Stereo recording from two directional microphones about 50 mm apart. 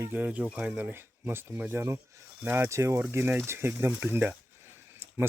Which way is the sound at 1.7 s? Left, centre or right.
Right.